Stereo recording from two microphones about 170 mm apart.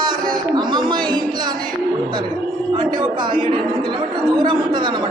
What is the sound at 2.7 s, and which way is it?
A woman's voice, 30° right (ahead or behind).